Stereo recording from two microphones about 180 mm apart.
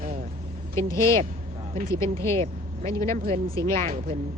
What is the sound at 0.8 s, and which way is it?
Speech, 15° left (ahead or behind).